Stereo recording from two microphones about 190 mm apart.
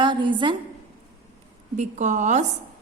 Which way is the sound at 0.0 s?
25° right (ahead or behind).